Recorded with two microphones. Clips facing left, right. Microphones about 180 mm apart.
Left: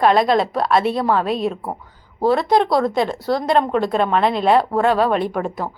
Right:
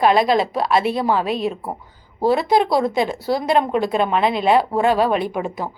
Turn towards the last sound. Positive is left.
turn(degrees=0)  # may be behind; listen again after turning